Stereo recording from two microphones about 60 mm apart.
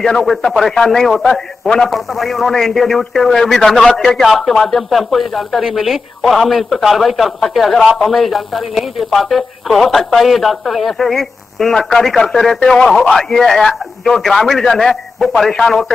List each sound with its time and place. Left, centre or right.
0.0 s a man's voice: centre